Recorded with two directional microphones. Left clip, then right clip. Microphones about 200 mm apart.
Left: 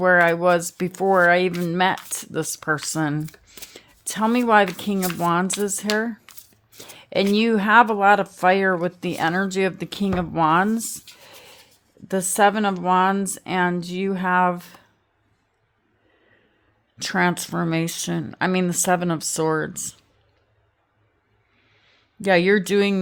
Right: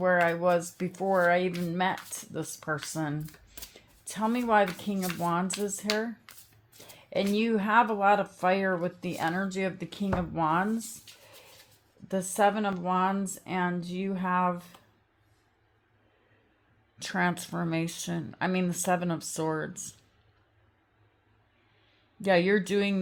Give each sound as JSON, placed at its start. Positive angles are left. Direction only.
{"t": 0.0, "sound": "speech", "side_deg": 50}
{"t": 3.4, "sound": "chopping", "side_deg": 50}
{"t": 4.8, "sound": "speech", "side_deg": 50}
{"t": 10.9, "sound": "a sound", "side_deg": 40}
{"t": 12.0, "sound": "speech", "side_deg": 50}
{"t": 17.0, "sound": "speech", "side_deg": 45}
{"t": 22.2, "sound": "speech", "side_deg": 45}